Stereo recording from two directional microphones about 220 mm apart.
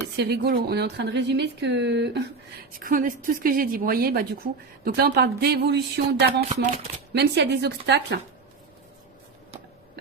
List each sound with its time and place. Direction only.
0.2 s speech: 45° right (ahead or behind)
2.7 s speech: 40° right (ahead or behind)